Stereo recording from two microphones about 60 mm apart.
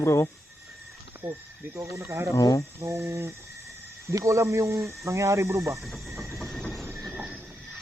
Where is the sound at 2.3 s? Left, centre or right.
Left.